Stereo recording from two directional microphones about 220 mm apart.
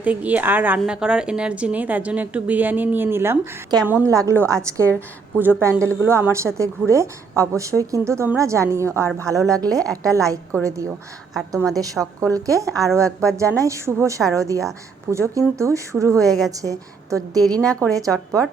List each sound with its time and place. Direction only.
0.0 s speech: 5° right (ahead or behind)
12.0 s speech: 5° right (ahead or behind)